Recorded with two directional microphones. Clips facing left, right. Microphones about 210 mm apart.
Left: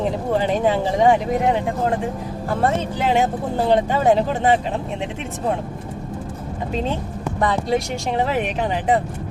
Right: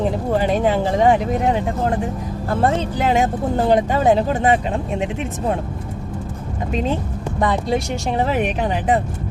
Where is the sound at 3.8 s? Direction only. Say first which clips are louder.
Right 1 dB; 15° right (ahead or behind).